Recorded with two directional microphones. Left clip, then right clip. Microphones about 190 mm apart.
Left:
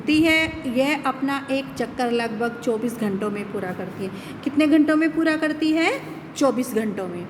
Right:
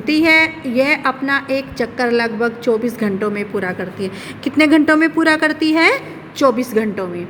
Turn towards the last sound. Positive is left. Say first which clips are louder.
# right 6 dB
turn(degrees=-20)  # may be behind; listen again after turning